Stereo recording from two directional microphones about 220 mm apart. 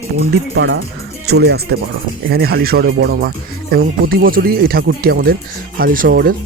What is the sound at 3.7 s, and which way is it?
Speech, 40° right (ahead or behind).